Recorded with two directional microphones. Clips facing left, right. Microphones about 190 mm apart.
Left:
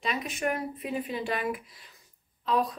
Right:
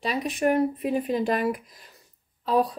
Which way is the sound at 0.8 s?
45° right (ahead or behind).